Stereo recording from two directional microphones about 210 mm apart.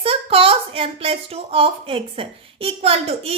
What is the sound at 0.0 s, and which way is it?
A woman's voice, 25° right (ahead or behind).